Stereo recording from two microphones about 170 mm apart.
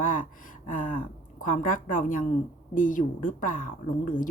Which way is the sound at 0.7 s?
50° left (ahead or behind).